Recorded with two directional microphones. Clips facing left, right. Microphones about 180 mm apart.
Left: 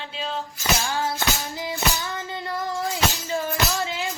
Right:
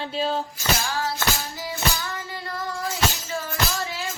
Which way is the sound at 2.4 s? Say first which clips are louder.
Left 3 dB; 20° left (ahead or behind).